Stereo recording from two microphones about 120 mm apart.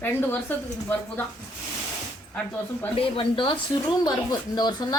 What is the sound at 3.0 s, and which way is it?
Speech, 45° left (ahead or behind).